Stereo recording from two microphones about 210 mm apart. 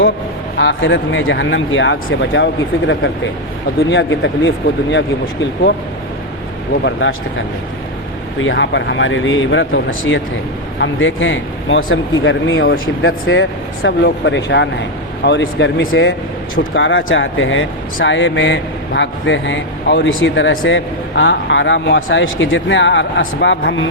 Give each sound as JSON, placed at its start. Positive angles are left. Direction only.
{"t": 0.5, "sound": "speech", "side_deg": 60}
{"t": 6.8, "sound": "speech", "side_deg": 60}
{"t": 8.4, "sound": "speech", "side_deg": 60}